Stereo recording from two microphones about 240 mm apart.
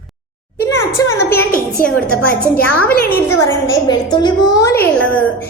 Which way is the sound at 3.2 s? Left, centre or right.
Centre.